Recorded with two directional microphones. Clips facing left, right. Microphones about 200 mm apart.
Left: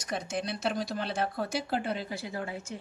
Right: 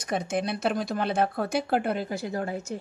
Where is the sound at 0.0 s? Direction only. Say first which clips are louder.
Right 6 dB; 55° right (ahead or behind).